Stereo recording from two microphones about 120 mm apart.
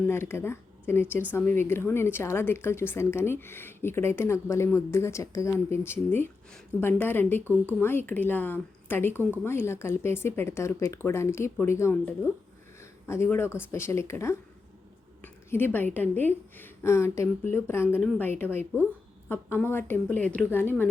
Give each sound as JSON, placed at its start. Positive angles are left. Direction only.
{"t": 0.1, "sound": "a woman's voice", "side_deg": 20}
{"t": 15.2, "sound": "a sound", "side_deg": 15}
{"t": 16.0, "sound": "a woman's voice", "side_deg": 15}